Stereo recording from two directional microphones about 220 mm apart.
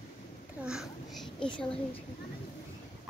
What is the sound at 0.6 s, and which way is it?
A child's voice, centre (ahead or behind).